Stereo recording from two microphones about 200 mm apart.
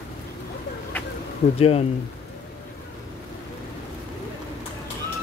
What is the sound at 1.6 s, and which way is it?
Speech, 30° left (ahead or behind).